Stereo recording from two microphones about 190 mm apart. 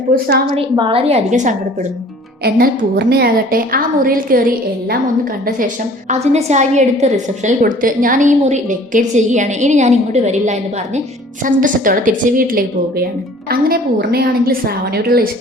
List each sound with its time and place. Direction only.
0.1 s a woman's voice: 55° right (ahead or behind)
0.5 s a woman's voice: 25° right (ahead or behind)
2.4 s a woman's voice: 55° right (ahead or behind)
5.5 s a woman's voice: 40° right (ahead or behind)